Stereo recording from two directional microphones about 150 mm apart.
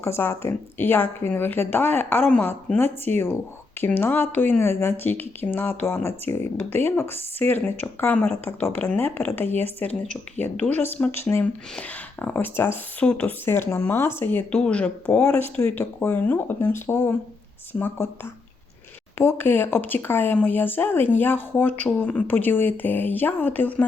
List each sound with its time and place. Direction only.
0.0 s speech: 15° left (ahead or behind)
19.1 s speech: 15° left (ahead or behind)